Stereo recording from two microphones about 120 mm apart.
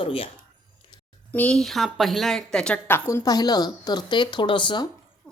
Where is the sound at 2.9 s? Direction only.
25° left (ahead or behind).